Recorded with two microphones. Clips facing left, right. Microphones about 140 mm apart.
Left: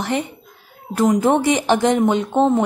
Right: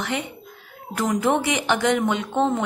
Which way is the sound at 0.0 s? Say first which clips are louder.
Left 5 dB; 35° left (ahead or behind).